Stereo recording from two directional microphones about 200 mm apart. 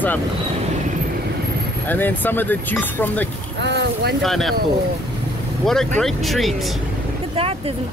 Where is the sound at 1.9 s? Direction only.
10° left (ahead or behind).